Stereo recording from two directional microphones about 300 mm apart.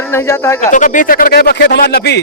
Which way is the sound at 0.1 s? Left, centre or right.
Centre.